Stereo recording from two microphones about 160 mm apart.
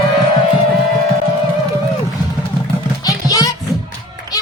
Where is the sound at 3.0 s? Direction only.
20° left (ahead or behind).